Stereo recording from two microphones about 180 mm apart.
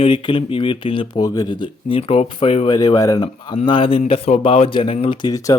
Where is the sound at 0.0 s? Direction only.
30° left (ahead or behind).